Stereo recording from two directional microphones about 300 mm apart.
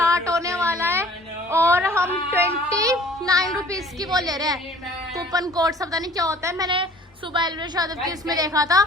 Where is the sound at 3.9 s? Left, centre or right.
Centre.